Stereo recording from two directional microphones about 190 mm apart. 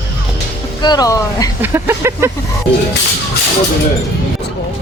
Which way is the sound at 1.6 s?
10° right (ahead or behind).